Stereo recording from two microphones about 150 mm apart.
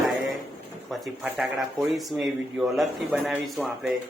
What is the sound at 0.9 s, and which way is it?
Speech, 5° right (ahead or behind).